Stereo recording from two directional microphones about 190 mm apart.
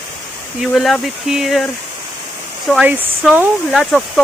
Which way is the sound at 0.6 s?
Centre (ahead or behind).